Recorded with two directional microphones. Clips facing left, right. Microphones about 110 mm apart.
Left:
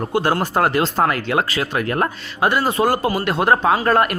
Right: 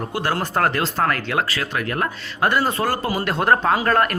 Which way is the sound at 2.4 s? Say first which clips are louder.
Left 1 dB; 5° left (ahead or behind).